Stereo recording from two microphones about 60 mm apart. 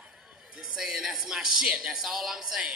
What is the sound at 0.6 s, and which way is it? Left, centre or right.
Speech, centre.